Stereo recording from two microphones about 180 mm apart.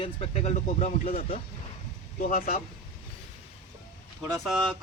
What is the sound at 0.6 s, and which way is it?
Speech, 50° left (ahead or behind).